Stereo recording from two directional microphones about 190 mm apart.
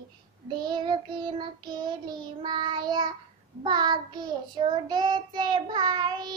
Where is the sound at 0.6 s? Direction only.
25° right (ahead or behind).